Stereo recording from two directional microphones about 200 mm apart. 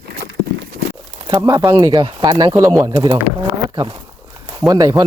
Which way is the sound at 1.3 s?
20° right (ahead or behind).